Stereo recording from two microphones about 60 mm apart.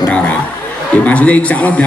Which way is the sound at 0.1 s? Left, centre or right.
Left.